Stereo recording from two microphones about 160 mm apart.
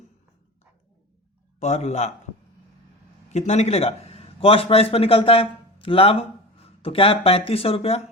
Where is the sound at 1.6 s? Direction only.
45° left (ahead or behind).